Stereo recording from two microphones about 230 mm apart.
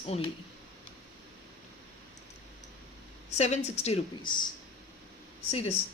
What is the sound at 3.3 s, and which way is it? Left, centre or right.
Speech, left.